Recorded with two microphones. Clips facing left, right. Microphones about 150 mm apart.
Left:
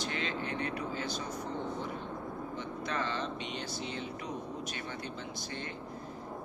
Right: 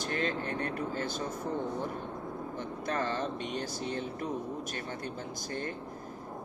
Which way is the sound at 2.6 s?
45° right (ahead or behind).